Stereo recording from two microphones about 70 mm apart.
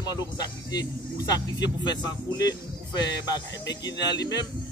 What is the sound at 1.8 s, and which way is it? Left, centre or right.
A man's voice, left.